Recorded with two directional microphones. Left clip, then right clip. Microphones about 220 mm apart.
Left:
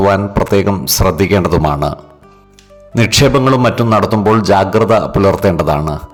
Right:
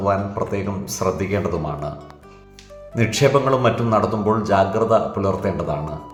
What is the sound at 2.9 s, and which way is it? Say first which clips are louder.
A man's voice: left 6 dB; 50° left (ahead or behind).